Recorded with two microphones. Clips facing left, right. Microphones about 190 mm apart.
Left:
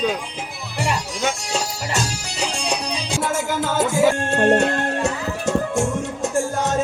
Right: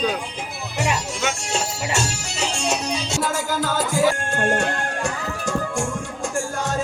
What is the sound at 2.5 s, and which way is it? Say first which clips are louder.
Music: right 3 dB; 15° left (ahead or behind).